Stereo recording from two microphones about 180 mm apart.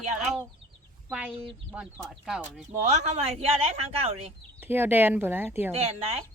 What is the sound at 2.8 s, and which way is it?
Speech, 40° right (ahead or behind).